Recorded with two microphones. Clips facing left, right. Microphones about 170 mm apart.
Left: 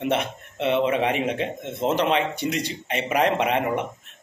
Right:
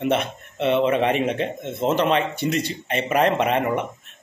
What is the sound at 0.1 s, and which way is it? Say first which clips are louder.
Mantra: right 2 dB; 15° left (ahead or behind).